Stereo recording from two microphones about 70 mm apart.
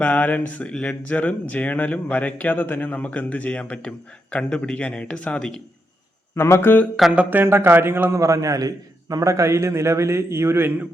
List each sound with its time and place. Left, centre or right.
0.0 s speech: centre
6.3 s speech: left
7.3 s speech: right
8.2 s a man's voice: right